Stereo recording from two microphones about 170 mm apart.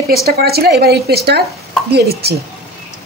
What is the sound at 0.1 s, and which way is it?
Speech, 65° right (ahead or behind).